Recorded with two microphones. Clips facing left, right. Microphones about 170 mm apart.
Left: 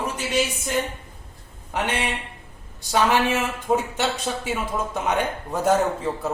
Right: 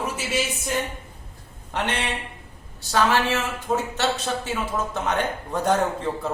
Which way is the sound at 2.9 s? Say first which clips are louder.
Left 1 dB; 10° left (ahead or behind).